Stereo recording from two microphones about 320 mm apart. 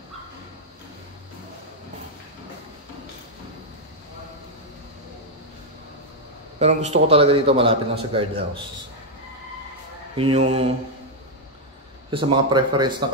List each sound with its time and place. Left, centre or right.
6.6 s a man's voice: right
10.1 s speech: centre
12.1 s a man's voice: centre